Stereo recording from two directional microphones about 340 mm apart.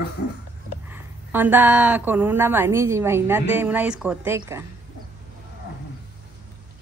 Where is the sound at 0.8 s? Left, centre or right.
Centre.